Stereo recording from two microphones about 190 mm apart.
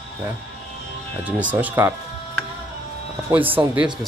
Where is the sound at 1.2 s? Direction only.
5° right (ahead or behind).